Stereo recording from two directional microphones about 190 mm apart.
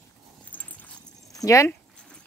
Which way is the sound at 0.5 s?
10° left (ahead or behind).